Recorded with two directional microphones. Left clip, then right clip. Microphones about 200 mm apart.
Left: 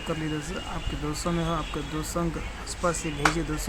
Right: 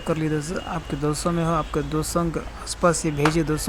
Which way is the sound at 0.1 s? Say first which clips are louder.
Right 7 dB; 20° right (ahead or behind).